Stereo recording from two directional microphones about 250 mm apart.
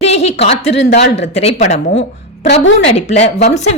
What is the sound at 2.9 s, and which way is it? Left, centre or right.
Speech, left.